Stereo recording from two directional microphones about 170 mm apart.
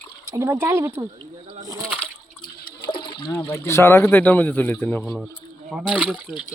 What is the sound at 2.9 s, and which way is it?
Water, 30° left (ahead or behind).